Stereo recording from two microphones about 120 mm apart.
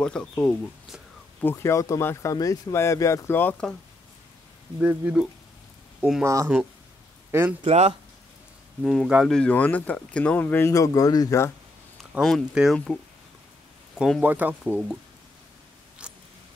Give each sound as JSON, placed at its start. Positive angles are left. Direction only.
{"t": 0.0, "sound": "speech", "side_deg": 5}
{"t": 1.4, "sound": "speech", "side_deg": 20}
{"t": 4.7, "sound": "speech", "side_deg": -10}
{"t": 6.2, "sound": "a man's voice", "side_deg": -25}
{"t": 7.6, "sound": "speech", "side_deg": -60}
{"t": 8.8, "sound": "speech", "side_deg": 0}
{"t": 9.3, "sound": "speech", "side_deg": 10}
{"t": 10.7, "sound": "speech", "side_deg": 30}
{"t": 12.0, "sound": "speech", "side_deg": 0}
{"t": 14.2, "sound": "speech", "side_deg": -15}
{"t": 14.6, "sound": "speech", "side_deg": -5}
{"t": 16.0, "sound": "a sound", "side_deg": -10}